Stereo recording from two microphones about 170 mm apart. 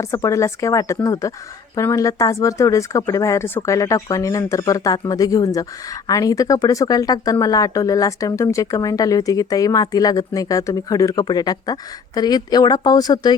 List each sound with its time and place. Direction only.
0.0 s speech: 20° left (ahead or behind)